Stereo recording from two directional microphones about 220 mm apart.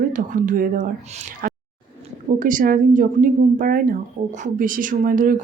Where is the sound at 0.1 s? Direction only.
35° right (ahead or behind).